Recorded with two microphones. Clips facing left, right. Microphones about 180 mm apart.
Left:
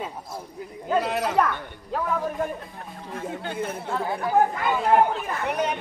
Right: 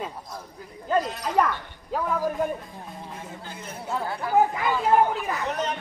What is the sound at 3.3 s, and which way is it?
Speech, 60° left (ahead or behind).